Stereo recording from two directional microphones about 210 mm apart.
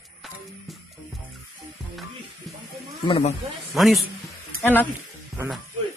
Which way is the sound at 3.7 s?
Centre (ahead or behind).